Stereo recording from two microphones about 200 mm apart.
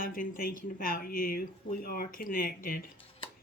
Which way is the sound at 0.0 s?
45° left (ahead or behind).